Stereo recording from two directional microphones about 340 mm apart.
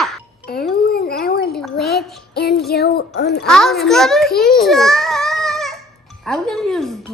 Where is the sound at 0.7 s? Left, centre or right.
Left.